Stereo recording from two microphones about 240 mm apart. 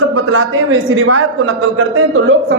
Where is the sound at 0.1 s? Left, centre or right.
Right.